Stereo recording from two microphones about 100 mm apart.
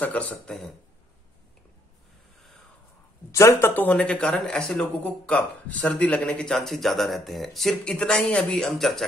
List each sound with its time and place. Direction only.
0.0 s a man's voice: 15° left (ahead or behind)
3.3 s a man's voice: 30° left (ahead or behind); by 9.0 s 5° left (ahead or behind)